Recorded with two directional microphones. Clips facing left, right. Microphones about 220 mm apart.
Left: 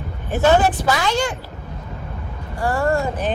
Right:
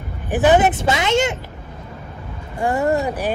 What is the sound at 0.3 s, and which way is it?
Speech, 15° right (ahead or behind).